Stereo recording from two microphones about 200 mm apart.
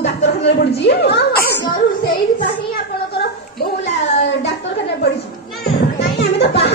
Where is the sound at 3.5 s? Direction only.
60° left (ahead or behind).